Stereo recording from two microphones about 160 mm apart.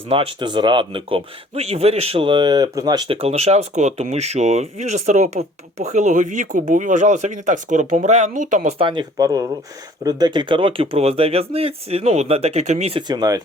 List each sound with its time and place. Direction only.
0.1 s speech: 35° right (ahead or behind)
3.1 s speech: 40° right (ahead or behind)
8.8 s speech: 30° right (ahead or behind)